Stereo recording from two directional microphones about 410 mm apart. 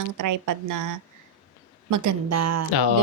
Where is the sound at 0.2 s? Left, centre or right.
Right.